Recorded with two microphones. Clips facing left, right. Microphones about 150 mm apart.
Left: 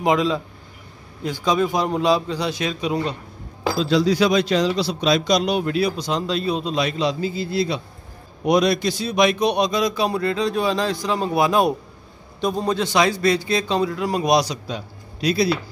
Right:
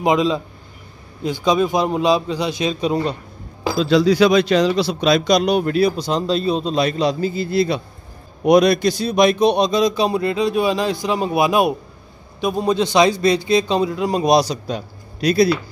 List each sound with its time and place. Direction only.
0.0 s a man's voice: 20° right (ahead or behind)
3.8 s a man's voice: 70° right (ahead or behind); by 14.6 s 35° right (ahead or behind)
14.7 s speech: 50° right (ahead or behind)